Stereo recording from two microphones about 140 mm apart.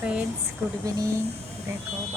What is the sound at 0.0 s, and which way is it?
Speech, 10° right (ahead or behind).